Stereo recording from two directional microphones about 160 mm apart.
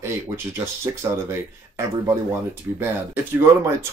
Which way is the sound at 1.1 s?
20° right (ahead or behind).